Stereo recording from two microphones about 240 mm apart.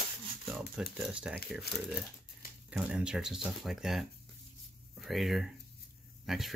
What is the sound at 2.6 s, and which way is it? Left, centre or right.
Speech, centre.